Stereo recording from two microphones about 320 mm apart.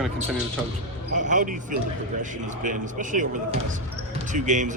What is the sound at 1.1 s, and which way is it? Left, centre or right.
Speech, right.